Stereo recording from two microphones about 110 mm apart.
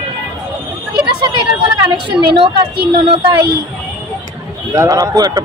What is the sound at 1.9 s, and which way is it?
Speech, 50° right (ahead or behind).